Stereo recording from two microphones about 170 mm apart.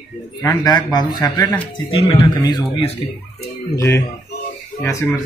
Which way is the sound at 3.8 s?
15° left (ahead or behind).